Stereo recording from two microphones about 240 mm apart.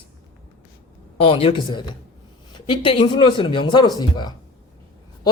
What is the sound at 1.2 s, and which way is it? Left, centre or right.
Speech, left.